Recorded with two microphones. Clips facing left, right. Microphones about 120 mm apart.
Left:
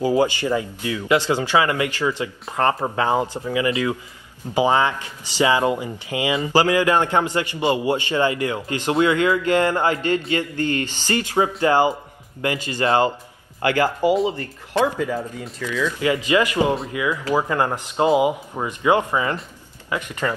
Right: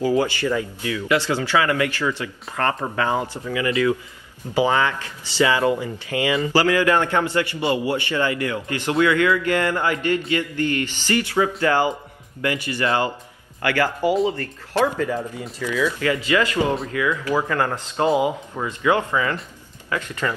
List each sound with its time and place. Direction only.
0.0 s speech: 20° left (ahead or behind)
15.6 s speech: 10° right (ahead or behind)
16.0 s speech: 15° left (ahead or behind)